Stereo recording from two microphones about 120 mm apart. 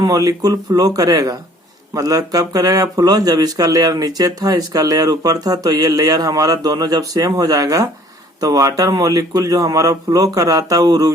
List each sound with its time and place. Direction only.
0.0 s speech: 30° right (ahead or behind)